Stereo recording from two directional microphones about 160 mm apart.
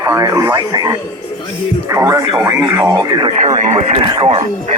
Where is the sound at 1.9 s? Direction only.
20° right (ahead or behind).